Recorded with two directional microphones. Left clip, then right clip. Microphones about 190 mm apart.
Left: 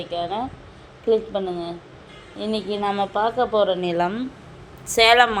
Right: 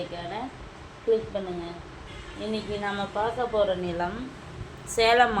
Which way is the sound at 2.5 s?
40° left (ahead or behind).